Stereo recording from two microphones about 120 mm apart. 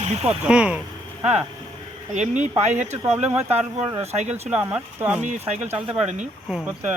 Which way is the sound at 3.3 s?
60° right (ahead or behind).